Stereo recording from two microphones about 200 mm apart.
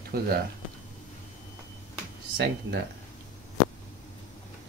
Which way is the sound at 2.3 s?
55° right (ahead or behind).